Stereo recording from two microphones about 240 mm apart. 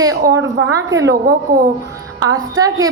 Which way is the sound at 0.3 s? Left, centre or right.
Right.